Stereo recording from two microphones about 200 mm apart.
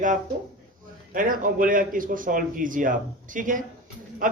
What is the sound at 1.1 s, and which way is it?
A man's voice, 45° right (ahead or behind).